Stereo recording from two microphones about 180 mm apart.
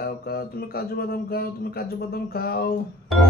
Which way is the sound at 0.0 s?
60° left (ahead or behind).